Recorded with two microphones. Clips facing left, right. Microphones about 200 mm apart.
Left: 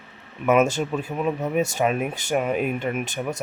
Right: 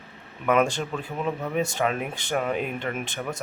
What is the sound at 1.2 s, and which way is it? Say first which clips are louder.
Speech: left 3 dB; 20° left (ahead or behind).